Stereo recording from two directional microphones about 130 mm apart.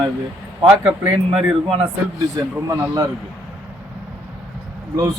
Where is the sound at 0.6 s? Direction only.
15° right (ahead or behind).